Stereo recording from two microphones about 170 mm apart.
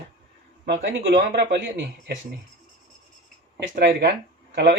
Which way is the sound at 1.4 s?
90° right.